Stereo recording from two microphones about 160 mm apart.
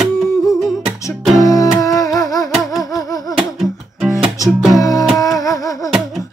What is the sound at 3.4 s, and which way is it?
Music, centre (ahead or behind).